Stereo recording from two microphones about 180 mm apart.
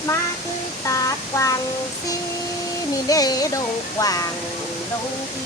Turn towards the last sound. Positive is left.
turn(degrees=20)  # may be behind; listen again after turning